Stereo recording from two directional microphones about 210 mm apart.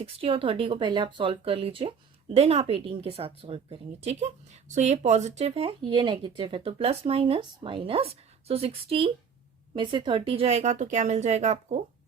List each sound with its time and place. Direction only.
0.0 s speech: 25° right (ahead or behind)